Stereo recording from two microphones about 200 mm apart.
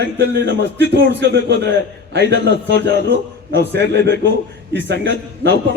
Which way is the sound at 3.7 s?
60° right (ahead or behind).